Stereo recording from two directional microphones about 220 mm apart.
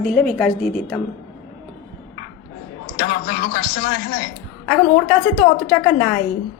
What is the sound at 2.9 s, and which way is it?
A man's voice, 45° left (ahead or behind).